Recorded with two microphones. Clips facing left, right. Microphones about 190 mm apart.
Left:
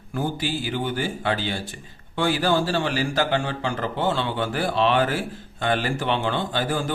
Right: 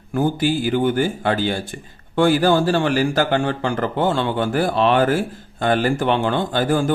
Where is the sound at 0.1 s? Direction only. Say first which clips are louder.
Right 7 dB; 50° right (ahead or behind).